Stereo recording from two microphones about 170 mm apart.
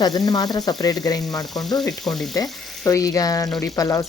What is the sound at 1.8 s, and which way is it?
Sizzle, centre (ahead or behind).